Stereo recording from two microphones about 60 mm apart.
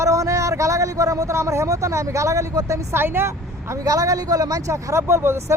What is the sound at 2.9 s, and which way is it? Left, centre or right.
Speech, right.